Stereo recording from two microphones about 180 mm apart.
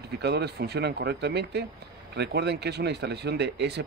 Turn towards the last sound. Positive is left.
turn(degrees=-65)  # may be behind; listen again after turning